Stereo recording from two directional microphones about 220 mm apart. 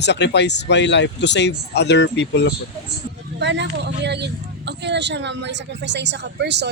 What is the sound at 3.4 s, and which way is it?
Speech, 50° right (ahead or behind).